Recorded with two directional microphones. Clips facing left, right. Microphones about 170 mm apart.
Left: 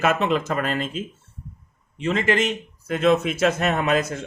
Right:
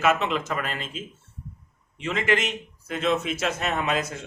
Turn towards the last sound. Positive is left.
turn(degrees=50)  # may be behind; listen again after turning